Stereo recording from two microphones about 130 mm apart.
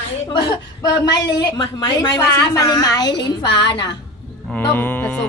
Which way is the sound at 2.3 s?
25° left (ahead or behind).